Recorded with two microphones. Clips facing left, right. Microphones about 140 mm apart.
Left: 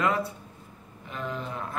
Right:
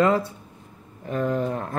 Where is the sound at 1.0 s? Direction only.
50° right (ahead or behind).